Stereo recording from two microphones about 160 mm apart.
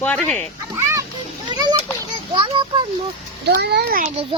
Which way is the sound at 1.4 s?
25° right (ahead or behind).